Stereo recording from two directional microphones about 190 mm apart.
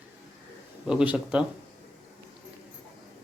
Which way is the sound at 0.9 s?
5° right (ahead or behind).